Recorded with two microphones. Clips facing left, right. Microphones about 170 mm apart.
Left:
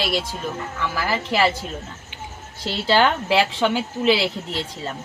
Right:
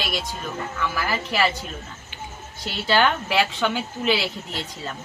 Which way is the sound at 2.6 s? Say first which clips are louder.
Left 2 dB; 30° left (ahead or behind).